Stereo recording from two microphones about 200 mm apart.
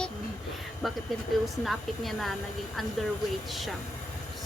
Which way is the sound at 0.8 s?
Centre (ahead or behind).